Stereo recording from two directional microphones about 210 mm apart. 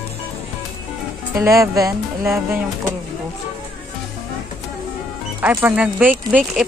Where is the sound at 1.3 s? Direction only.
15° right (ahead or behind).